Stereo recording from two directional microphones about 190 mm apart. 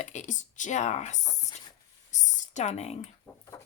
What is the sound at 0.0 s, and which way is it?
Speech, 40° left (ahead or behind).